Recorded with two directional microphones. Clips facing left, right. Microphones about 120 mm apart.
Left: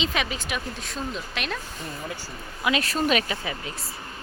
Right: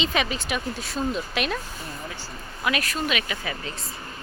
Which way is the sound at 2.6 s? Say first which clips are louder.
Left 2 dB; 25° left (ahead or behind).